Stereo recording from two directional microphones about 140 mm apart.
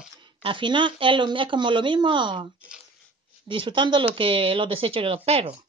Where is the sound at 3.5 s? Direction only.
35° right (ahead or behind).